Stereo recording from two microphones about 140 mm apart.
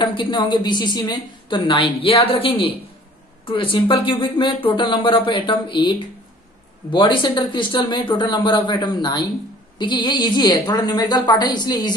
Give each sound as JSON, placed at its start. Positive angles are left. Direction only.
{"t": 0.0, "sound": "a woman's voice", "side_deg": 35}